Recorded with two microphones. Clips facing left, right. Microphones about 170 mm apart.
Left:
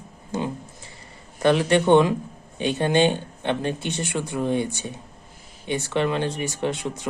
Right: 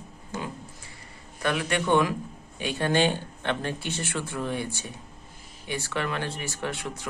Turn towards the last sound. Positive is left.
turn(degrees=20)  # may be behind; listen again after turning